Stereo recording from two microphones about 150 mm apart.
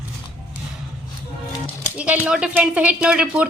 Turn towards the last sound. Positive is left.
turn(degrees=-5)  # may be behind; listen again after turning